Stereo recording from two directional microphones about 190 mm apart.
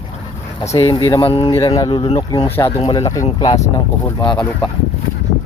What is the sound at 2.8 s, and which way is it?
Speech, 25° left (ahead or behind).